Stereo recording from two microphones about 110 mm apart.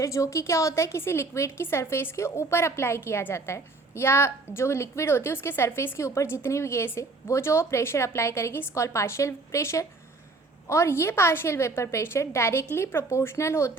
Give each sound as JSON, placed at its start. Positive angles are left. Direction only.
{"t": 0.0, "sound": "a woman's voice", "side_deg": 30}